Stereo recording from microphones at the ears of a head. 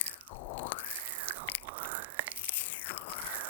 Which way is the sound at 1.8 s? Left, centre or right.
Right.